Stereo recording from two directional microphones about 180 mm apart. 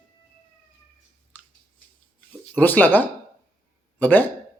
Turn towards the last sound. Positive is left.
turn(degrees=10)  # may be behind; listen again after turning